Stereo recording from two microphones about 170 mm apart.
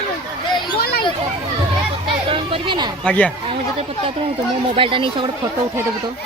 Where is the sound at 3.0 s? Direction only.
5° left (ahead or behind).